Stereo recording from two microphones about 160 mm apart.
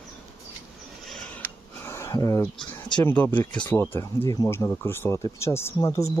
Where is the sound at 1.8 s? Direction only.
15° left (ahead or behind).